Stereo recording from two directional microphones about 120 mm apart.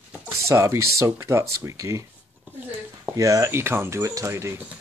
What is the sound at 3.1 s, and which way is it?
Speech, 30° right (ahead or behind).